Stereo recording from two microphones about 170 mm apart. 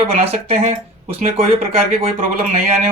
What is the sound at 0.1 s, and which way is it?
Speech, 40° right (ahead or behind).